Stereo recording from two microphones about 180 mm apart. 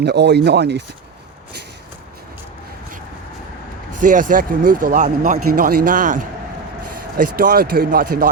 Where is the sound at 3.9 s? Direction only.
45° right (ahead or behind).